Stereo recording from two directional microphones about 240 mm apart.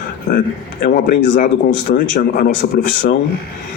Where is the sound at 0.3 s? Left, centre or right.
Left.